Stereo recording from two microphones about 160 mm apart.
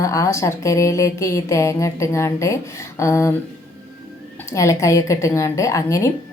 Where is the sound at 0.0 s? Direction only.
20° left (ahead or behind).